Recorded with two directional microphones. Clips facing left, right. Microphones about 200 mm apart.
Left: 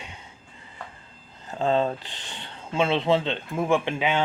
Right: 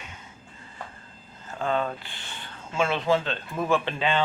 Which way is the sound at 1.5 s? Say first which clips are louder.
Left 4 dB; 30° left (ahead or behind).